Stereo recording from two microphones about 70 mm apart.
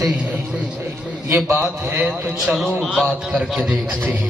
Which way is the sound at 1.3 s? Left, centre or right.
Right.